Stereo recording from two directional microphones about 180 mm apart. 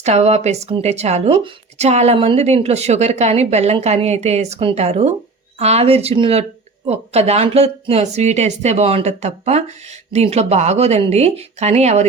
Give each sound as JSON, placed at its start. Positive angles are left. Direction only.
{"t": 0.0, "sound": "speech", "side_deg": -35}